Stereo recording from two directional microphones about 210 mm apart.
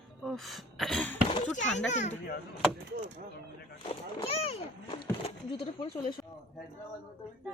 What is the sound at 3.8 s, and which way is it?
Speech, 30° left (ahead or behind).